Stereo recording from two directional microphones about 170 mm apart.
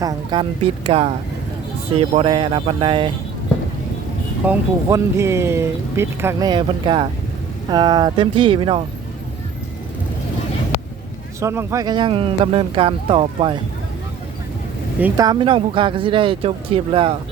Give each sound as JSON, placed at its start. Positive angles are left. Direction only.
{"t": 0.0, "sound": "speech", "side_deg": -25}
{"t": 0.6, "sound": "speech", "side_deg": -35}
{"t": 4.4, "sound": "speech", "side_deg": -15}
{"t": 6.5, "sound": "speech", "side_deg": -30}
{"t": 11.3, "sound": "speech", "side_deg": -15}
{"t": 15.1, "sound": "speech", "side_deg": -25}